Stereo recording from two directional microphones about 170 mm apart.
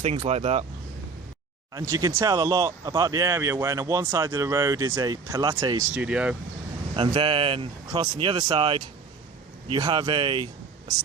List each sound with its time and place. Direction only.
0.3 s speech: 40° right (ahead or behind)
1.7 s speech: 15° right (ahead or behind)
5.9 s speech: 5° right (ahead or behind)
6.9 s speech: 30° right (ahead or behind)